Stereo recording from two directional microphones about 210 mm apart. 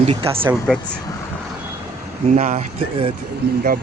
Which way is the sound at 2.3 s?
35° right (ahead or behind).